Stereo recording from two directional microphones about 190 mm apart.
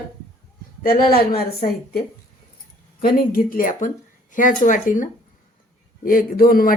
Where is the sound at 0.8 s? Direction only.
50° left (ahead or behind).